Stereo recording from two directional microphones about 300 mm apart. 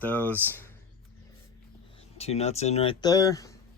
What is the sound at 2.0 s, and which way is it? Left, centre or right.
Speech, left.